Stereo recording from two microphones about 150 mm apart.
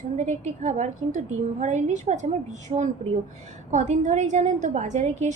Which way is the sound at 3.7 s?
55° right (ahead or behind).